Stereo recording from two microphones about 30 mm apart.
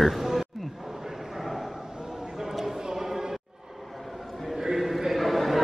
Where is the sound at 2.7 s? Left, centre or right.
Centre.